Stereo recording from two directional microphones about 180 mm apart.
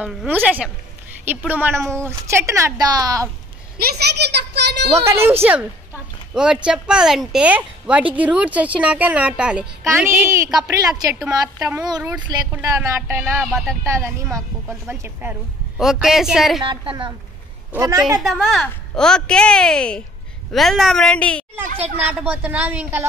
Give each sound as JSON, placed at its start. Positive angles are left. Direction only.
{"t": 0.0, "sound": "speech", "side_deg": -5}
{"t": 3.7, "sound": "a child's voice", "side_deg": -60}
{"t": 5.0, "sound": "speech", "side_deg": -15}
{"t": 11.1, "sound": "a woman's voice", "side_deg": -5}
{"t": 11.8, "sound": "speech", "side_deg": -20}
{"t": 13.4, "sound": "a woman's voice", "side_deg": 0}
{"t": 13.7, "sound": "speech", "side_deg": -15}
{"t": 15.8, "sound": "a woman's voice", "side_deg": 0}
{"t": 16.6, "sound": "speech", "side_deg": -25}
{"t": 18.3, "sound": "a woman's voice", "side_deg": 0}
{"t": 21.6, "sound": "speech", "side_deg": -35}
{"t": 22.0, "sound": "speech", "side_deg": -10}